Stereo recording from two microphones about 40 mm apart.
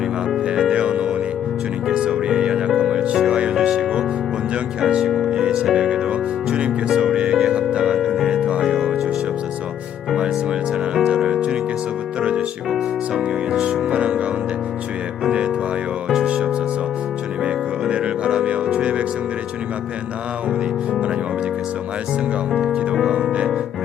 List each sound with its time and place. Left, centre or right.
0.4 s music: right
1.9 s music: centre
5.3 s music: right
7.9 s music: centre
8.3 s music: right
8.6 s music: centre
12.2 s music: right
16.2 s music: right
22.5 s music: right